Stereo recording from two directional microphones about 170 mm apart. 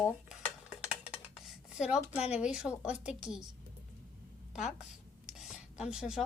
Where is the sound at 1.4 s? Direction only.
5° right (ahead or behind).